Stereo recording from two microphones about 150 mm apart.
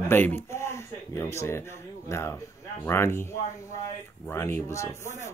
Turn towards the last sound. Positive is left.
turn(degrees=20)  # may be behind; listen again after turning